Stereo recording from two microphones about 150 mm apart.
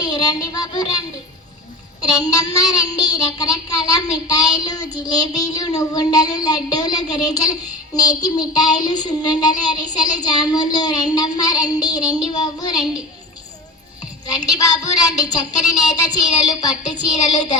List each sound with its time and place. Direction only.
0.0 s child singing: 25° left (ahead or behind)
2.1 s child singing: 25° left (ahead or behind)
14.3 s child singing: 25° left (ahead or behind)